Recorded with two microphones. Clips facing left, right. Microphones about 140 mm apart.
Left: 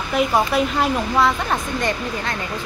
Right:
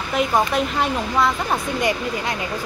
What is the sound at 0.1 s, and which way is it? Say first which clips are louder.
A woman's voice: left 1 dB; 5° left (ahead or behind).